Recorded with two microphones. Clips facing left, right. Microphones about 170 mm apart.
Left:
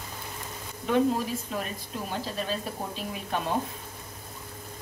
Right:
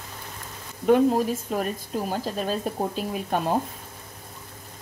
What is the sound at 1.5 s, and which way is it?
Speech, 45° right (ahead or behind).